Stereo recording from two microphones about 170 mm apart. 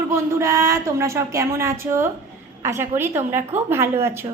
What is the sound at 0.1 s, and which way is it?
A woman's voice, 15° right (ahead or behind).